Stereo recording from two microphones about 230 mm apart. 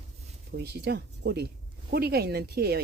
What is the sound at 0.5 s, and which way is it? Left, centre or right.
Speech, right.